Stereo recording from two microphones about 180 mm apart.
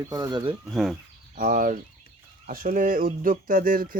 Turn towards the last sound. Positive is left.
turn(degrees=-50)  # may be behind; listen again after turning